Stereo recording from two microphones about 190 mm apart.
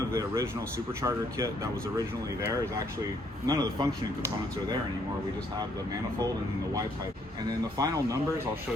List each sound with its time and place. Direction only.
0.1 s a man's voice: 15° right (ahead or behind)
7.8 s speech: 15° right (ahead or behind)